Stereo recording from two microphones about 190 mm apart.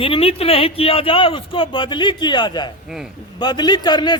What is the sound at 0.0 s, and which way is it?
A man's voice, 30° left (ahead or behind).